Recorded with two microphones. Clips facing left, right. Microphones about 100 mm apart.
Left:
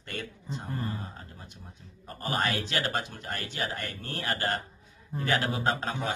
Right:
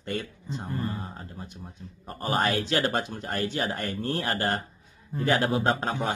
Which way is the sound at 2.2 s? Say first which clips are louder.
Right 4 dB; 30° right (ahead or behind).